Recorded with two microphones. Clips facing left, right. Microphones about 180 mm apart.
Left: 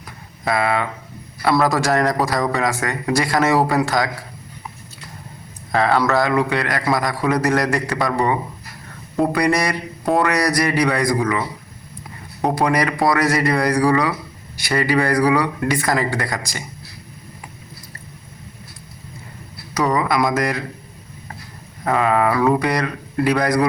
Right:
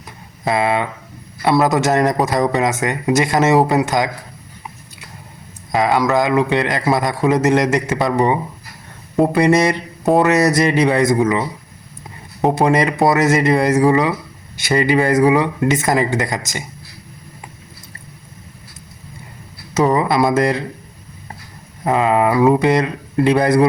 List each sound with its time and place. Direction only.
0.4 s speech: 20° right (ahead or behind)
5.7 s speech: 15° right (ahead or behind)
19.7 s speech: 25° right (ahead or behind)
21.8 s speech: 20° right (ahead or behind)